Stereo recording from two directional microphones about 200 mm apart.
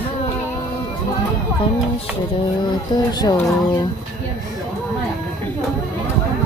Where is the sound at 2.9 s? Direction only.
20° left (ahead or behind).